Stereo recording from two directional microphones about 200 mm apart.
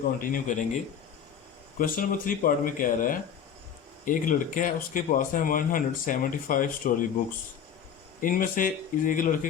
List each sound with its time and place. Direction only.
0.2 s speech: 45° left (ahead or behind)
1.8 s speech: 45° left (ahead or behind)
8.2 s speech: 45° left (ahead or behind)